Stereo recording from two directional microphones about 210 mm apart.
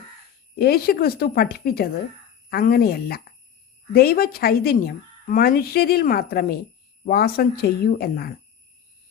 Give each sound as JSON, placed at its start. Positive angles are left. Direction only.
{"t": 0.6, "sound": "a woman's voice", "side_deg": 45}